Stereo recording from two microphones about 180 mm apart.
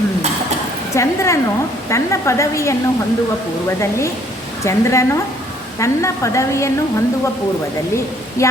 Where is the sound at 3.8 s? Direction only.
15° left (ahead or behind).